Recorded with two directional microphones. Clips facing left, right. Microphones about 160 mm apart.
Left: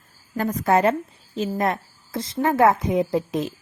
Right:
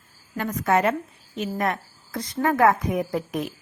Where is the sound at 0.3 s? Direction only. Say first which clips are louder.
Left 2 dB; 35° left (ahead or behind).